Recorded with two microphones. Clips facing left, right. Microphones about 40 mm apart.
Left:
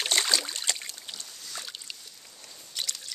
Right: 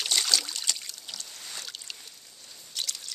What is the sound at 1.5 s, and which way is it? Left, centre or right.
Boat, centre.